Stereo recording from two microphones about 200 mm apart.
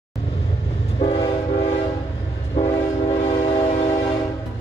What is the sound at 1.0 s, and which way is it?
Train, 30° left (ahead or behind).